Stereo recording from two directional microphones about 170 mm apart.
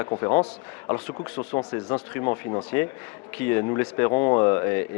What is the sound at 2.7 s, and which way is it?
A man's voice, 15° left (ahead or behind).